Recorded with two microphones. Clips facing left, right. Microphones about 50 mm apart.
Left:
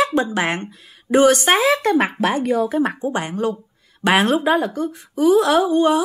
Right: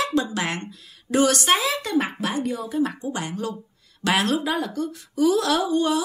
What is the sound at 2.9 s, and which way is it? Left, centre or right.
Speech, left.